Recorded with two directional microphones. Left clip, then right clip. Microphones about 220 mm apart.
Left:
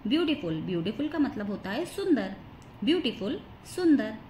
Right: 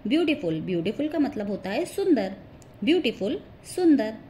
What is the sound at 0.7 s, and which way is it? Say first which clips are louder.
A woman's voice: right 3 dB; 15° right (ahead or behind).